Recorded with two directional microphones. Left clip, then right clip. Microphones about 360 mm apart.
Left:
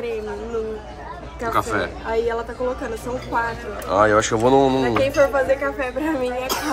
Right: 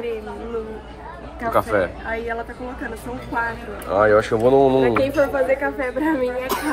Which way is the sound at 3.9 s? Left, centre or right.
Centre.